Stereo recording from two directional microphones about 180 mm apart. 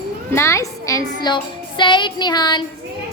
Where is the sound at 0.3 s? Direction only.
15° left (ahead or behind).